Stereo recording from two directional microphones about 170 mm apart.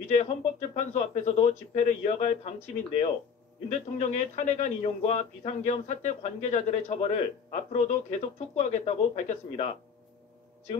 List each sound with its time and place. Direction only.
0.1 s speech: 40° left (ahead or behind)
3.6 s speech: 45° left (ahead or behind)